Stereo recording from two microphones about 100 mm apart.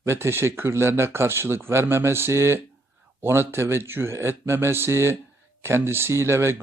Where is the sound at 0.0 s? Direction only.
25° right (ahead or behind).